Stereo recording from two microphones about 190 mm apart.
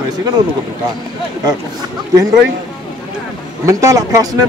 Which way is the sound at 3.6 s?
15° right (ahead or behind).